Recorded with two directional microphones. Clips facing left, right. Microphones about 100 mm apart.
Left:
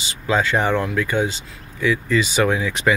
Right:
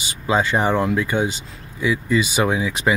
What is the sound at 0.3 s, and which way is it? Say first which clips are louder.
Speech: even; 15° right (ahead or behind).